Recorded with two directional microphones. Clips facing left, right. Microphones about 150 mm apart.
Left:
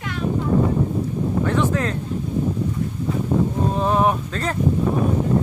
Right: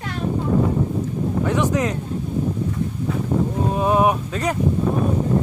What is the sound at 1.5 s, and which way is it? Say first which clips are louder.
Speech: right 2 dB; 15° right (ahead or behind).